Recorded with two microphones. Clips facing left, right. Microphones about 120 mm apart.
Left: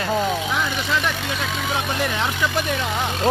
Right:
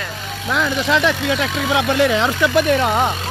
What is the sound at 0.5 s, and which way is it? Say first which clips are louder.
Speech: right 5 dB; 90° right.